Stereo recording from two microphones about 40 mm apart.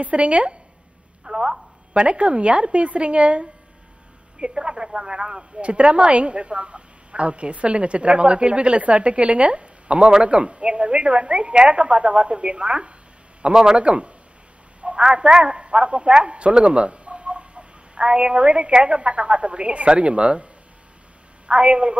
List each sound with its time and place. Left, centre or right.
0.0 s a woman's voice: right
1.2 s speech: centre
2.0 s a woman's voice: right
13.7 s a woman's voice: right
21.5 s a woman's voice: right